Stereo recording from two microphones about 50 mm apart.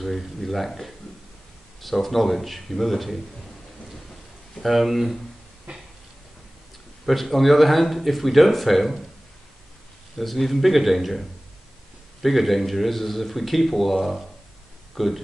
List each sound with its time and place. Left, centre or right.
0.0 s speech: centre
4.6 s speech: centre
5.7 s a sound: right
7.1 s speech: centre
10.1 s speech: centre